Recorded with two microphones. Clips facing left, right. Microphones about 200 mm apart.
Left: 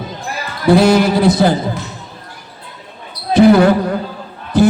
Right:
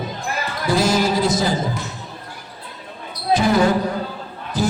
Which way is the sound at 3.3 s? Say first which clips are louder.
Left 8 dB; 60° left (ahead or behind).